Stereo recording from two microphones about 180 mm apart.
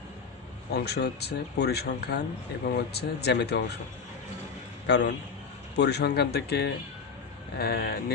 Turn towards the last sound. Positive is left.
turn(degrees=60)  # may be behind; listen again after turning